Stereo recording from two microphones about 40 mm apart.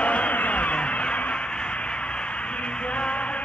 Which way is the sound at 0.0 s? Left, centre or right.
Left.